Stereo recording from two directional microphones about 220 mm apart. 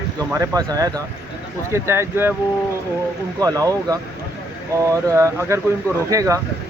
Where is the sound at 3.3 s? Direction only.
15° right (ahead or behind).